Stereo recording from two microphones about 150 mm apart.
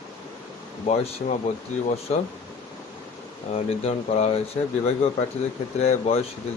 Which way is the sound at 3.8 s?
45° left (ahead or behind).